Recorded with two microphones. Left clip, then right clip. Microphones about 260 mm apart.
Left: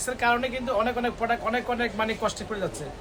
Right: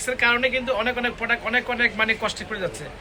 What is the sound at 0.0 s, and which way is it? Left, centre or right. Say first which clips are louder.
A man's voice: right 4 dB; centre.